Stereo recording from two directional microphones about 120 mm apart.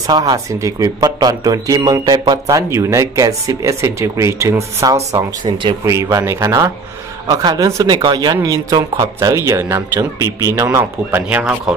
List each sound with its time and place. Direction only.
0.0 s speech: 30° right (ahead or behind)
5.4 s speech: 40° right (ahead or behind)
5.9 s speech: 25° right (ahead or behind)